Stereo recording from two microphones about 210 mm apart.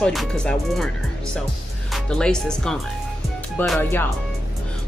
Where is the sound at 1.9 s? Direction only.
5° left (ahead or behind).